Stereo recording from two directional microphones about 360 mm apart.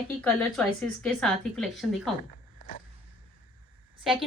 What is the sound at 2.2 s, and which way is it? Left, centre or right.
Zipper, left.